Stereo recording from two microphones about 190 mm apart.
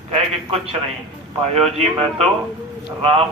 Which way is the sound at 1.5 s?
35° right (ahead or behind).